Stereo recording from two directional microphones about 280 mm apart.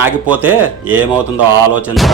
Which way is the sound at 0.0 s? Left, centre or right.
Centre.